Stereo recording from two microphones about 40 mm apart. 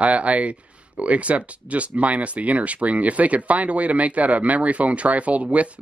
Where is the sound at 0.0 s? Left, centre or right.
Right.